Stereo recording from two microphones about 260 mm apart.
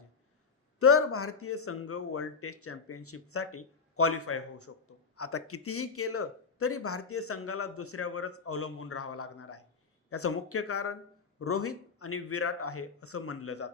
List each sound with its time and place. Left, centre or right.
0.8 s speech: left